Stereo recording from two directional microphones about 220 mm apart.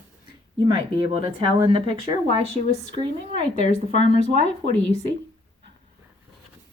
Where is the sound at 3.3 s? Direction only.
35° left (ahead or behind).